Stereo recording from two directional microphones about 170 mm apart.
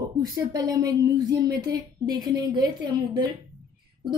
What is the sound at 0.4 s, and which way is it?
A woman's voice, 20° right (ahead or behind).